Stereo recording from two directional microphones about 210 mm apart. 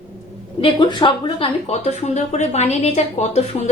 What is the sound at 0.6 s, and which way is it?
Speech, 25° left (ahead or behind).